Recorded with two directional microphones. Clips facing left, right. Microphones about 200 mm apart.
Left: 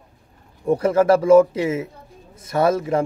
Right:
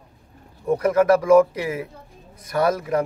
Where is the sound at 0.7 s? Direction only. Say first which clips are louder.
Left 1 dB; 30° left (ahead or behind).